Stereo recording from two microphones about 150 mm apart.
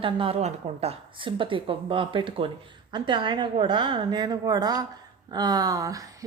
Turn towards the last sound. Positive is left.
turn(degrees=-25)  # may be behind; listen again after turning